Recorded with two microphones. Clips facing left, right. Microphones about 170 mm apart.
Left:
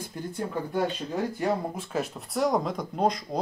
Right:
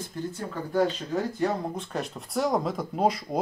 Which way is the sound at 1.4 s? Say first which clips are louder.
Even; 5° left (ahead or behind).